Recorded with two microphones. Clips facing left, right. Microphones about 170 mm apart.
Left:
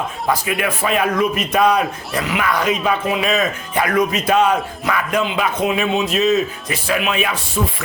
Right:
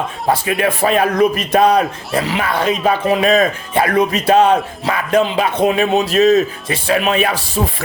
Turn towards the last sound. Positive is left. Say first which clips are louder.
# right 3 dB
turn(degrees=-35)  # may be behind; listen again after turning